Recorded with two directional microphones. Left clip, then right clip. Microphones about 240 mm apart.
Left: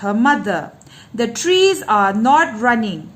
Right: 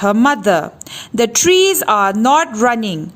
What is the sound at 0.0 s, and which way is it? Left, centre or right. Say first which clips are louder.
A woman's voice: right 3 dB; right.